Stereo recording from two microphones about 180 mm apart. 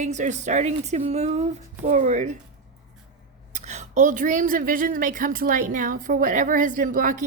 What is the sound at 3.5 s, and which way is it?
A woman's voice, 40° right (ahead or behind).